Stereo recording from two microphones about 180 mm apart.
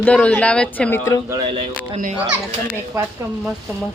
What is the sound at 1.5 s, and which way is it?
Speech, 30° right (ahead or behind).